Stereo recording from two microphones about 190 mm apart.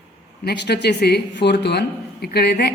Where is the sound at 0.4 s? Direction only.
60° left (ahead or behind).